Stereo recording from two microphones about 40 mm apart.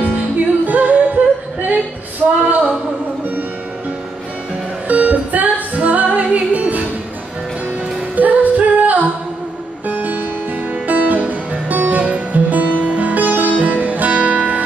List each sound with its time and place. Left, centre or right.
0.7 s music: right
2.4 s a sound: right
4.8 s music: right
8.2 s music: right